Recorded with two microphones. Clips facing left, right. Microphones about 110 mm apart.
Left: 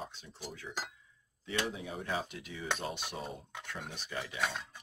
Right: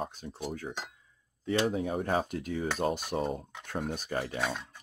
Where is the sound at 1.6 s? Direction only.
45° right (ahead or behind).